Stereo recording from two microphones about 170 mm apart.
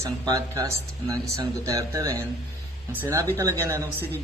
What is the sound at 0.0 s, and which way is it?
Speech, 15° right (ahead or behind).